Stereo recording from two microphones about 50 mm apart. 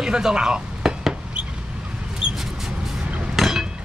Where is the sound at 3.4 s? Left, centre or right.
Centre.